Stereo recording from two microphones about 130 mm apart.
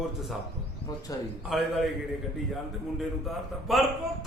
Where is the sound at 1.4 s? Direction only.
Centre (ahead or behind).